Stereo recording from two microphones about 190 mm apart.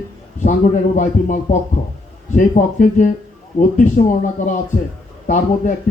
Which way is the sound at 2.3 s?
40° left (ahead or behind).